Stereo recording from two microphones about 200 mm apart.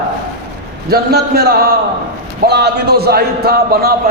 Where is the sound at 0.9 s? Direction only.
50° right (ahead or behind).